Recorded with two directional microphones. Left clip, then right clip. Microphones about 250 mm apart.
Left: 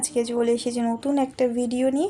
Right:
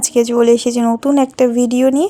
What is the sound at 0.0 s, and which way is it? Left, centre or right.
Speech, right.